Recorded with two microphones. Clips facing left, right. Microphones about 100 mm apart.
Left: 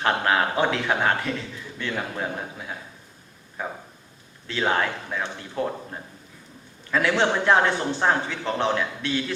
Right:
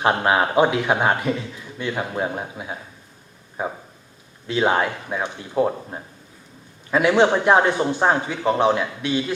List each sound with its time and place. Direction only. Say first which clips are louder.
0.0 s a man's voice: right 3 dB; 20° right (ahead or behind)